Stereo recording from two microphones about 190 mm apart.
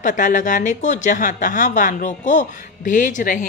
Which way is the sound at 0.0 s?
40° left (ahead or behind).